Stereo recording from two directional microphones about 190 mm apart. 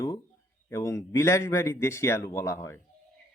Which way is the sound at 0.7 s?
15° left (ahead or behind).